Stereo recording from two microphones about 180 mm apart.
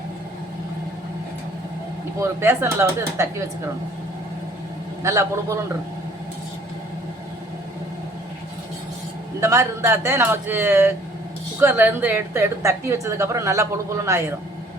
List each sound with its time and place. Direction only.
2.1 s a woman's voice: 15° right (ahead or behind)
5.0 s a woman's voice: 15° right (ahead or behind)
9.4 s a woman's voice: 15° right (ahead or behind)